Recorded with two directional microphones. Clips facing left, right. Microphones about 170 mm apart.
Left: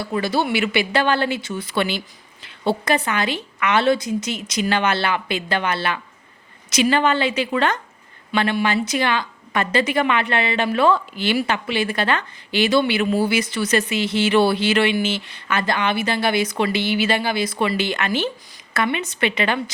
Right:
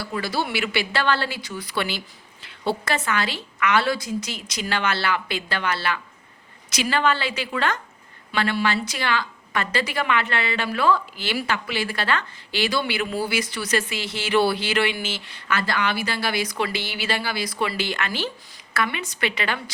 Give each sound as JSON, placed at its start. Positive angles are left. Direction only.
{"t": 0.0, "sound": "a woman's voice", "side_deg": 20}